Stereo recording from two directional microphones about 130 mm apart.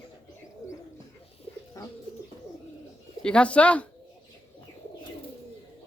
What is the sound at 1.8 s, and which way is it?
Bird, 25° left (ahead or behind).